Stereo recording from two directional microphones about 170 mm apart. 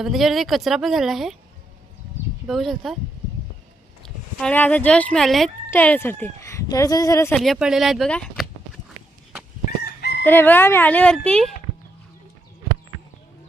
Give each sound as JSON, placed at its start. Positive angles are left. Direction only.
{"t": 0.0, "sound": "speech", "side_deg": 0}
{"t": 2.5, "sound": "speech", "side_deg": 0}
{"t": 4.0, "sound": "speech", "side_deg": 5}
{"t": 7.3, "sound": "speech", "side_deg": 0}
{"t": 9.6, "sound": "chicken", "side_deg": 65}
{"t": 10.2, "sound": "speech", "side_deg": 10}